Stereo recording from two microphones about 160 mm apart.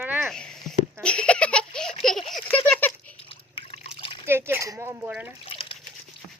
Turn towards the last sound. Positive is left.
turn(degrees=35)  # may be behind; listen again after turning